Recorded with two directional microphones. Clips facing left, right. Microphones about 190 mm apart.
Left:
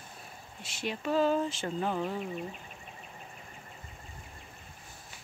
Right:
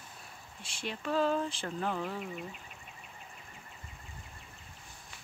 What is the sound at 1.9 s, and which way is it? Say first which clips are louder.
Speech: left 2 dB; 25° left (ahead or behind).